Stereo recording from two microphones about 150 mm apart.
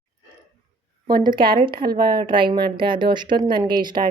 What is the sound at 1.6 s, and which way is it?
Speech, 35° right (ahead or behind).